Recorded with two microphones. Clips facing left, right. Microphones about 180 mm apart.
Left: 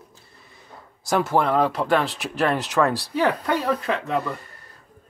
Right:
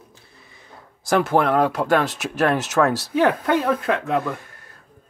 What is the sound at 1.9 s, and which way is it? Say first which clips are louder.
Speech: right 2 dB; 45° right (ahead or behind).